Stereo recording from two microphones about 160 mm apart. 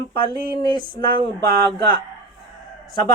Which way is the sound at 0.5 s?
25° left (ahead or behind).